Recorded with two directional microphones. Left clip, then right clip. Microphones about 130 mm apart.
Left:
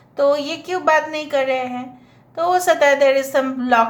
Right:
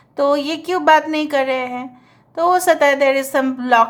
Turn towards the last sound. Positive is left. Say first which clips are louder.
# right 2 dB
turn(degrees=-40)  # may be behind; listen again after turning